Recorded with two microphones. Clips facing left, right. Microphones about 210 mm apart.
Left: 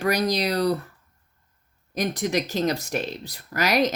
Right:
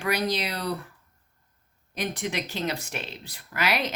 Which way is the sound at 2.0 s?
40° left (ahead or behind).